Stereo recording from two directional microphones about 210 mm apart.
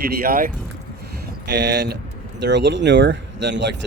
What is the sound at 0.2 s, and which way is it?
Speech, 45° right (ahead or behind).